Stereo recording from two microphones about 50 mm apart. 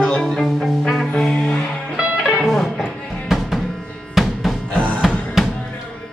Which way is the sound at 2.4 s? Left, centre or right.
Centre.